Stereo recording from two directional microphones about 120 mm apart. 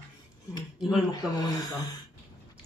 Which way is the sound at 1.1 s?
35° left (ahead or behind).